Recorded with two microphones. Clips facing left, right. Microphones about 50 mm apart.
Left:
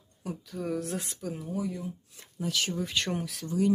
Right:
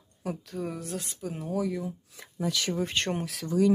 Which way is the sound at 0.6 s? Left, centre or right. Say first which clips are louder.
Left 4 dB; centre.